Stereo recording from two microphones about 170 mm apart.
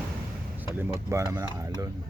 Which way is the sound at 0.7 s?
15° right (ahead or behind).